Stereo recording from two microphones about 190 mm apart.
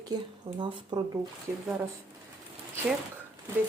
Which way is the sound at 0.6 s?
25° right (ahead or behind).